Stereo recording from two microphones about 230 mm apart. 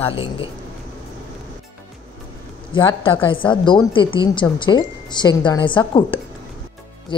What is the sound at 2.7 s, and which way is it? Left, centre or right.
A woman's voice, left.